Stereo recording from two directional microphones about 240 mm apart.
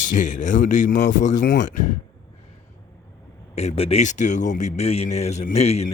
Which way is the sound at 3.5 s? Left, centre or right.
Left.